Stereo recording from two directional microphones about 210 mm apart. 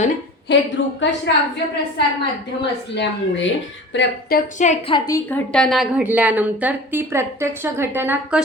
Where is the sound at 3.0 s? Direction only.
60° left (ahead or behind).